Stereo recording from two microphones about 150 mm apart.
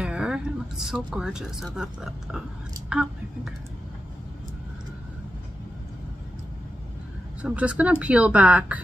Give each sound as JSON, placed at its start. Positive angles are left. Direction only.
{"t": 0.0, "sound": "speech", "side_deg": -5}
{"t": 7.4, "sound": "speech", "side_deg": -10}